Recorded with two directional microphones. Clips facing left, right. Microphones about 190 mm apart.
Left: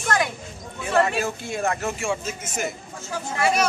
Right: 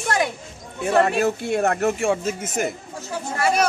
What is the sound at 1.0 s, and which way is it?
Speech, 60° right (ahead or behind).